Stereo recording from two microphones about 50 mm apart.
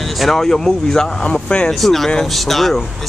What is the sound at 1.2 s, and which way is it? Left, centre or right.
Speech, left.